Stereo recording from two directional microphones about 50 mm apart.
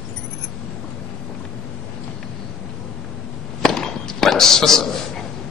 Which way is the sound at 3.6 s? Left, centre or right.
Centre.